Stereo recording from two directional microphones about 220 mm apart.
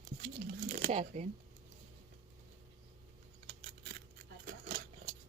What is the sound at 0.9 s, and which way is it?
Speech, 30° right (ahead or behind).